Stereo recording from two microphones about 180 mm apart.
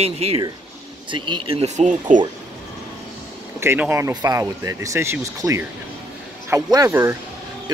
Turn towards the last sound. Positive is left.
turn(degrees=-15)  # may be behind; listen again after turning